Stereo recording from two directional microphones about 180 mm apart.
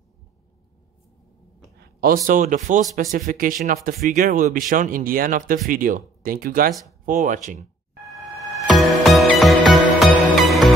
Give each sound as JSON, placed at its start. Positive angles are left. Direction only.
{"t": 1.8, "sound": "a man's voice", "side_deg": -55}
{"t": 8.1, "sound": "music", "side_deg": 0}